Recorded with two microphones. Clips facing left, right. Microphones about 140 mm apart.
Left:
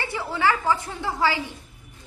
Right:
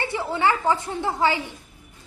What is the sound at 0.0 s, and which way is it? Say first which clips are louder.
A woman's voice: right 1 dB; 20° right (ahead or behind).